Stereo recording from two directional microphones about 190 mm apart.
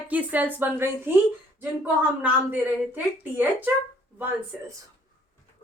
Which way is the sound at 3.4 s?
10° right (ahead or behind).